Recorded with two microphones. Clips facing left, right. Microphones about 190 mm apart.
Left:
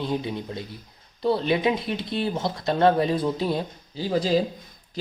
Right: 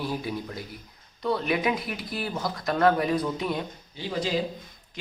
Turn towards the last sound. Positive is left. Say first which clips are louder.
# left 6 dB
turn(degrees=35)  # may be behind; listen again after turning